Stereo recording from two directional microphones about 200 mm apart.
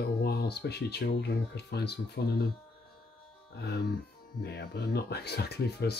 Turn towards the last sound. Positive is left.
turn(degrees=55)  # may be behind; listen again after turning